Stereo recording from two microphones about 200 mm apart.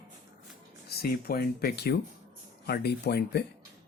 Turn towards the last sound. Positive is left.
turn(degrees=55)  # may be behind; listen again after turning